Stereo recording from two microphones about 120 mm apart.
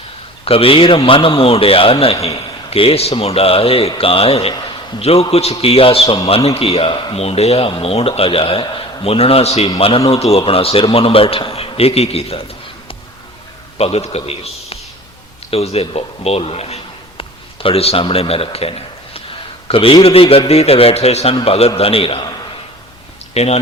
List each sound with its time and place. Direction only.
0.4 s a man's voice: 50° left (ahead or behind)
13.7 s a man's voice: 60° left (ahead or behind)
23.3 s speech: 60° left (ahead or behind)